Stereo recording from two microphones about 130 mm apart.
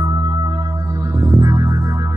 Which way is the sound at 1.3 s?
30° right (ahead or behind).